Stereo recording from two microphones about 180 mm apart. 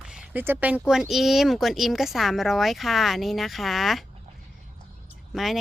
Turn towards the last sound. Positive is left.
turn(degrees=0)  # may be behind; listen again after turning